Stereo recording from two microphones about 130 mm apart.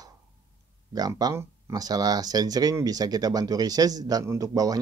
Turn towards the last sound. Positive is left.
turn(degrees=-30)  # may be behind; listen again after turning